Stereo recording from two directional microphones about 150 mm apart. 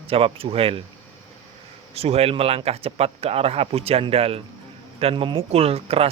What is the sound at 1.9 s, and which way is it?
Speech, 45° right (ahead or behind).